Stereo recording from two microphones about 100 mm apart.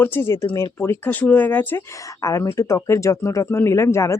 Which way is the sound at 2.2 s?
35° left (ahead or behind).